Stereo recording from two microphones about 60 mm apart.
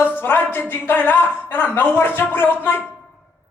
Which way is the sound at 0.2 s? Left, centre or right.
Left.